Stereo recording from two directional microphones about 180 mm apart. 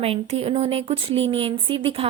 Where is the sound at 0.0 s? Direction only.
35° right (ahead or behind).